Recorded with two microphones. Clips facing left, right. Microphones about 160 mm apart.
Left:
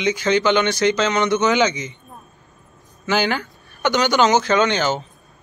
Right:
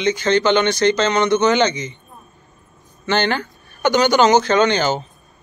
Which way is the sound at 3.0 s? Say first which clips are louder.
Right 1 dB; 5° left (ahead or behind).